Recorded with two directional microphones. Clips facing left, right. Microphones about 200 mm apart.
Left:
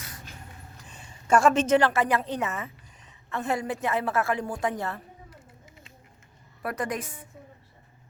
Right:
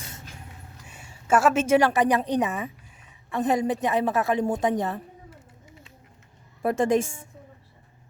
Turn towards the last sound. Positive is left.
turn(degrees=-25)  # may be behind; listen again after turning